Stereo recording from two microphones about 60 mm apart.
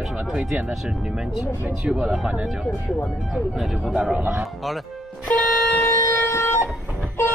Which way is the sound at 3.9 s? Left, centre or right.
Centre.